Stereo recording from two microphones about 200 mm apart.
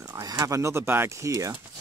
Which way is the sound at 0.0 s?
20° right (ahead or behind).